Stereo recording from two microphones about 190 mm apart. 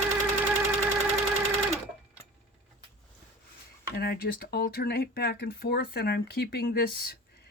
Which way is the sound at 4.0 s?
55° left (ahead or behind).